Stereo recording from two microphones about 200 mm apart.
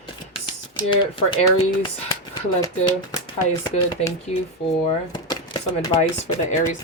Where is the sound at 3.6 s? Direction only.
15° left (ahead or behind).